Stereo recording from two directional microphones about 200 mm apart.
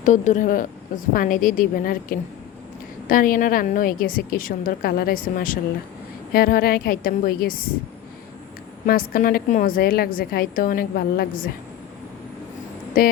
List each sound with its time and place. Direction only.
0.0 s a woman's voice: 40° left (ahead or behind)
8.9 s a woman's voice: 45° left (ahead or behind)
13.0 s a woman's voice: 45° left (ahead or behind)